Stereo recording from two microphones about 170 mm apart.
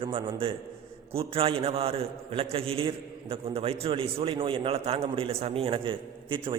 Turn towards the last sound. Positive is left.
turn(degrees=-30)  # may be behind; listen again after turning